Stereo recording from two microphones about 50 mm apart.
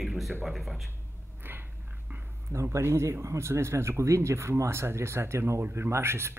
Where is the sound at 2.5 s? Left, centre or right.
Right.